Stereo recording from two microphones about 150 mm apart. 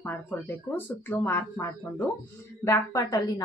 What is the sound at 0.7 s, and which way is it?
A woman's voice, 15° left (ahead or behind).